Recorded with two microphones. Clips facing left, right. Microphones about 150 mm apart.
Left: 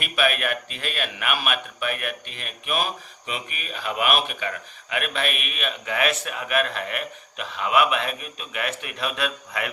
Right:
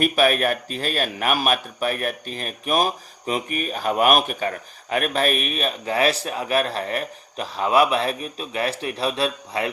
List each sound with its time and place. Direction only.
0.0 s a man's voice: 40° right (ahead or behind)